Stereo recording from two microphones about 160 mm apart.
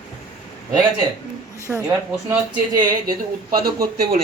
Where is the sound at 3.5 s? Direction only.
70° right (ahead or behind).